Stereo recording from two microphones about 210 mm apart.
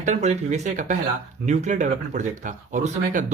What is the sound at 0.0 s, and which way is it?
Speech, 35° right (ahead or behind).